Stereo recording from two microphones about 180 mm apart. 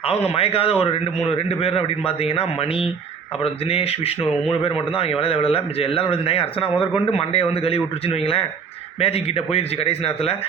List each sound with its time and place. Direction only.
0.0 s speech: 35° left (ahead or behind)